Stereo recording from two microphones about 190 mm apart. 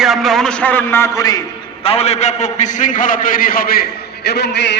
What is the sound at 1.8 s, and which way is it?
A man's voice, 35° left (ahead or behind).